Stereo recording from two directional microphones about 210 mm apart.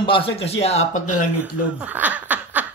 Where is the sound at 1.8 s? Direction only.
5° right (ahead or behind).